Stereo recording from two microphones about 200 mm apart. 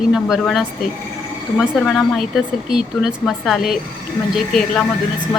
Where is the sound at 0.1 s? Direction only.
Centre (ahead or behind).